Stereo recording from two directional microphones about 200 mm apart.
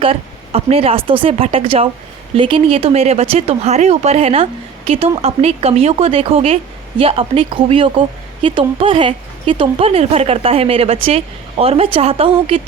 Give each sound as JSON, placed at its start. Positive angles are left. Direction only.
{"t": 0.0, "sound": "speech", "side_deg": -30}